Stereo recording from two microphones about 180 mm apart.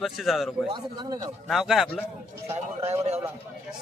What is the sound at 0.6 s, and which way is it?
Speech, 25° right (ahead or behind).